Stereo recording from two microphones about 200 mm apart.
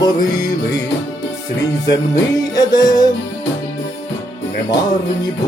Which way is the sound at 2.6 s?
20° left (ahead or behind).